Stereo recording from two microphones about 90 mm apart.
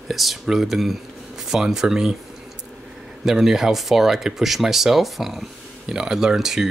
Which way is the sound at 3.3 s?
5° right (ahead or behind).